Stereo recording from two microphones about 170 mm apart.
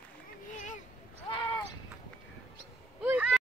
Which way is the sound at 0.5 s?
50° left (ahead or behind).